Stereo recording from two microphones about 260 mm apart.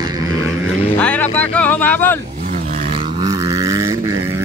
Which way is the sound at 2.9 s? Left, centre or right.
Centre.